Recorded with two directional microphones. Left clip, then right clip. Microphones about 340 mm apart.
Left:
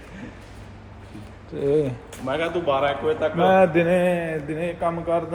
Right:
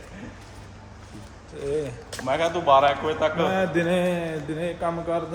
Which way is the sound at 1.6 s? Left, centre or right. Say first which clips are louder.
Left 7 dB; centre.